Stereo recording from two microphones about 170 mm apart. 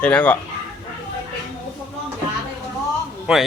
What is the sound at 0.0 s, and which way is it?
Speech, 10° left (ahead or behind).